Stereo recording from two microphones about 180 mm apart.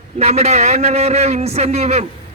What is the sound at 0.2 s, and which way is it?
A man's voice, 35° right (ahead or behind).